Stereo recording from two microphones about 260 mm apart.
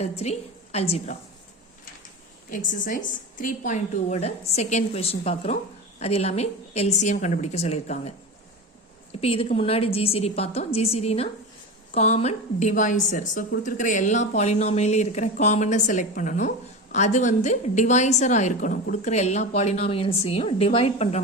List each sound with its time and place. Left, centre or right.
0.0 s a woman's voice: left
2.5 s a woman's voice: left
9.2 s a woman's voice: left